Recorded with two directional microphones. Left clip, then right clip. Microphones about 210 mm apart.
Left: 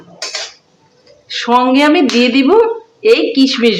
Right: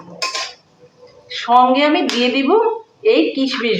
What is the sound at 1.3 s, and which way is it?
Speech, 50° left (ahead or behind).